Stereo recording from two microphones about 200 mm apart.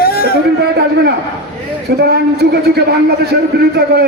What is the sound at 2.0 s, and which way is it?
Speech, 55° right (ahead or behind).